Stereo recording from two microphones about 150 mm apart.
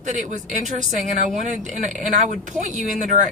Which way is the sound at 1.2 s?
55° right (ahead or behind).